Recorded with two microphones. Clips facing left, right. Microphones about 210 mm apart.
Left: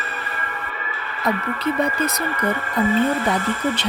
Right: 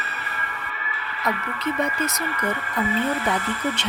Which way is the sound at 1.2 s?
35° left (ahead or behind).